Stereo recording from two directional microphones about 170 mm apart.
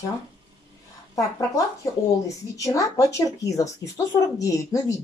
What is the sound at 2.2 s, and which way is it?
Speech, 20° left (ahead or behind).